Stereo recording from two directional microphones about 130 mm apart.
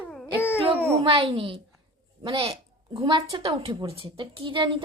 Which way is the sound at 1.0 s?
40° right (ahead or behind).